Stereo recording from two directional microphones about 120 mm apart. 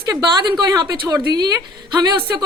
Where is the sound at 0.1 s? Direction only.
35° right (ahead or behind).